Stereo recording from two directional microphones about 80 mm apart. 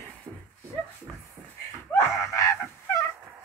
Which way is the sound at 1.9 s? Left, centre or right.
Left.